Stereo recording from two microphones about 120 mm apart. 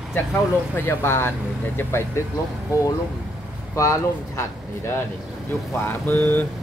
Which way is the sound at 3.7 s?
25° left (ahead or behind).